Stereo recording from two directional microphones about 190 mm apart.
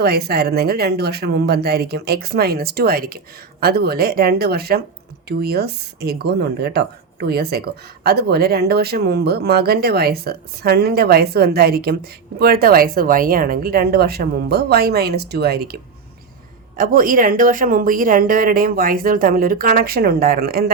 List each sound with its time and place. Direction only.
0.0 s speech: 55° right (ahead or behind)